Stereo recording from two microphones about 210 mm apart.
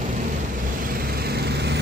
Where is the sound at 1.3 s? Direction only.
50° right (ahead or behind).